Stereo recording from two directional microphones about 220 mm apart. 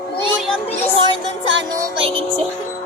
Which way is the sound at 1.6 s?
15° right (ahead or behind).